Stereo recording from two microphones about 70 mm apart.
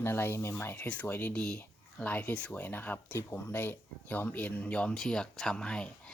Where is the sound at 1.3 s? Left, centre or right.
Centre.